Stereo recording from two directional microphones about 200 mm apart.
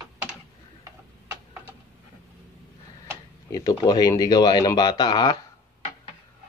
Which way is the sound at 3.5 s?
20° left (ahead or behind).